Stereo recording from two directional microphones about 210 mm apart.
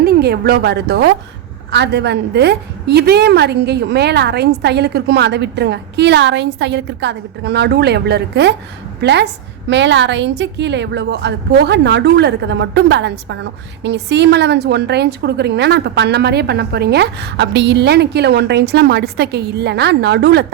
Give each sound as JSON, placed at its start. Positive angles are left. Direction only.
{"t": 0.0, "sound": "a woman's voice", "side_deg": -50}